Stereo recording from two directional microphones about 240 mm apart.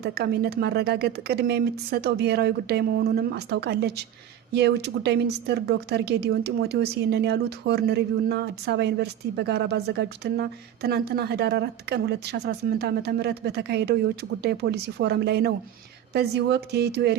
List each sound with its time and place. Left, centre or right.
0.0 s speech: right